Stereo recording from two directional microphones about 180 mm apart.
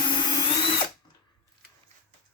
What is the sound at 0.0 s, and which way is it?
Drill, 25° left (ahead or behind).